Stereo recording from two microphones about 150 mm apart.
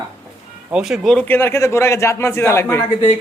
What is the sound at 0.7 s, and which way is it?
Speech, 5° right (ahead or behind).